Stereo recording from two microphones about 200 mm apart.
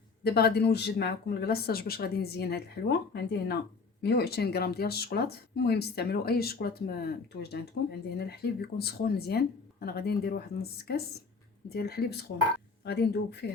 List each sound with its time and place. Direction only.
0.3 s speech: 55° left (ahead or behind)